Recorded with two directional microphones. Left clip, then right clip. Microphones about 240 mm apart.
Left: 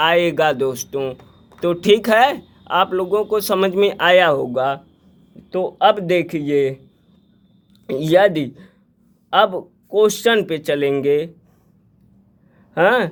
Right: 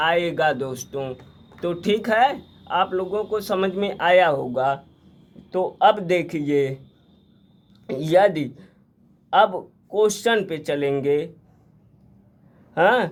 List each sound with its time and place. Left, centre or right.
0.0 s speech: left
7.9 s speech: left
12.7 s speech: left